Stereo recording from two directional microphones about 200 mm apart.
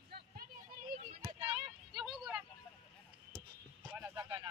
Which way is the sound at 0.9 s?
25° right (ahead or behind).